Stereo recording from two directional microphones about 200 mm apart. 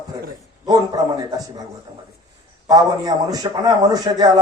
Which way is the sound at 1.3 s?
20° right (ahead or behind).